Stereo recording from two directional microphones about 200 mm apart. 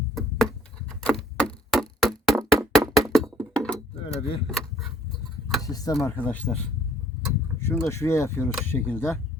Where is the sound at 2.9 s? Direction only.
Centre (ahead or behind).